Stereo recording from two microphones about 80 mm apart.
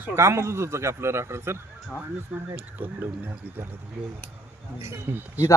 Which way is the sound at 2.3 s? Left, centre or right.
Right.